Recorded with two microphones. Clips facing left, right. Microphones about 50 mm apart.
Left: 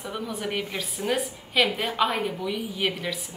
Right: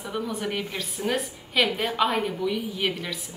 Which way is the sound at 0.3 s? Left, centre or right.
Centre.